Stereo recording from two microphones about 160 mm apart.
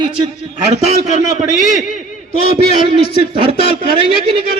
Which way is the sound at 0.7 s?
45° right (ahead or behind).